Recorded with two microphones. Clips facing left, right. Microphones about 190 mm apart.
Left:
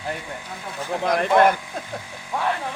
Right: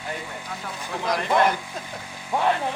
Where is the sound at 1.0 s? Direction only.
55° left (ahead or behind).